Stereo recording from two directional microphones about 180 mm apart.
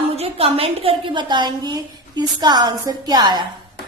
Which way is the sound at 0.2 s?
35° right (ahead or behind).